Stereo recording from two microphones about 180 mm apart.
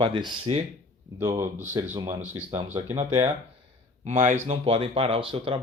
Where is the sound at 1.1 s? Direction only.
15° right (ahead or behind).